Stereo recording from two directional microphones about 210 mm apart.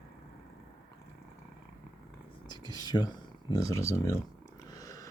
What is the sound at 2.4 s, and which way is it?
Speech, 20° left (ahead or behind).